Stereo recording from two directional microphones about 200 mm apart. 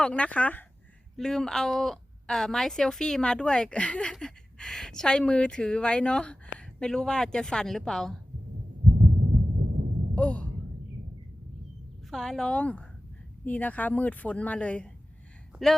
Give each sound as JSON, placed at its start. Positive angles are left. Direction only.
{"t": 0.0, "sound": "a woman's voice", "side_deg": 5}
{"t": 9.0, "sound": "heart murmur", "side_deg": -55}
{"t": 10.2, "sound": "speech", "side_deg": 5}
{"t": 12.1, "sound": "a woman's voice", "side_deg": 0}